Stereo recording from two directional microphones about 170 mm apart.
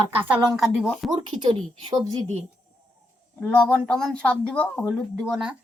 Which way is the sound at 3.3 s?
5° left (ahead or behind).